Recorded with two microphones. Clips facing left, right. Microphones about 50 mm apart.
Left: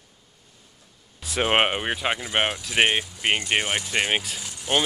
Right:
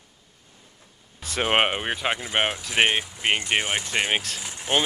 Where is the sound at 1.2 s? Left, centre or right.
Centre.